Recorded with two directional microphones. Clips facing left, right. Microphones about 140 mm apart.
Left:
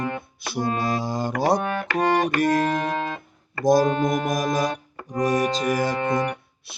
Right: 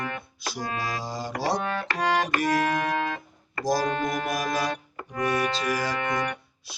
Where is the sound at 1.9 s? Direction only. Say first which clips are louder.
Left 5 dB; 50° left (ahead or behind).